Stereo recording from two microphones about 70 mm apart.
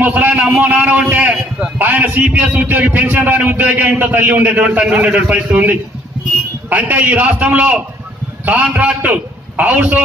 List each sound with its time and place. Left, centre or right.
0.0 s a man's voice: right